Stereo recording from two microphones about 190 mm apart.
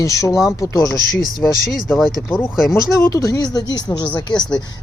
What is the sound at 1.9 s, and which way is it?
Speech, centre (ahead or behind).